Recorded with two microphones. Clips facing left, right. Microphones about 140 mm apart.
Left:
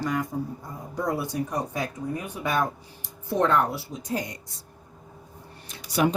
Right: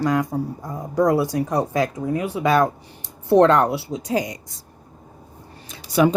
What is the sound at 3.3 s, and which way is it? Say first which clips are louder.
Speech: right 8 dB; 75° right (ahead or behind).